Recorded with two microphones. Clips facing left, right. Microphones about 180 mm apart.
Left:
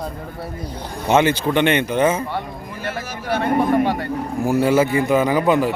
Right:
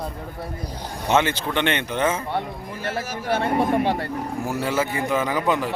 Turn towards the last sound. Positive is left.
turn(degrees=10)  # may be behind; listen again after turning